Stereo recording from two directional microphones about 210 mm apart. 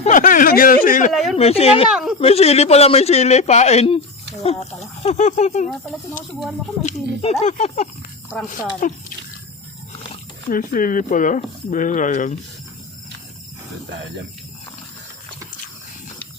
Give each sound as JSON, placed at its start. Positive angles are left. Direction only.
{"t": 0.0, "sound": "speech", "side_deg": 40}
{"t": 1.1, "sound": "a woman's voice", "side_deg": 0}
{"t": 1.4, "sound": "a man's voice", "side_deg": 30}
{"t": 1.9, "sound": "speech", "side_deg": -5}
{"t": 2.1, "sound": "a man's voice", "side_deg": 30}
{"t": 5.0, "sound": "speech", "side_deg": 35}
{"t": 6.8, "sound": "speech", "side_deg": 30}
{"t": 10.5, "sound": "speech", "side_deg": 40}